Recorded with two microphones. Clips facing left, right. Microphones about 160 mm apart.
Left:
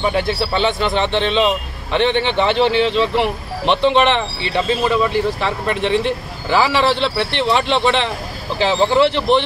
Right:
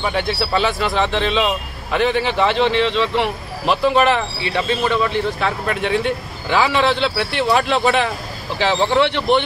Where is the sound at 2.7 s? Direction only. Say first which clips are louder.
Left 1 dB; 35° left (ahead or behind).